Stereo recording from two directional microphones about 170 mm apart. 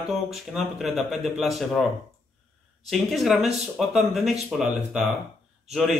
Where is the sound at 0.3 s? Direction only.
Centre (ahead or behind).